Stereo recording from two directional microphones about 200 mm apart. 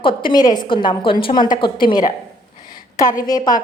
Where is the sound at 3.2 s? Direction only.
20° left (ahead or behind).